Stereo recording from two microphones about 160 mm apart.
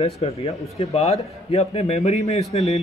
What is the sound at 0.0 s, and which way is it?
A man's voice, 40° left (ahead or behind).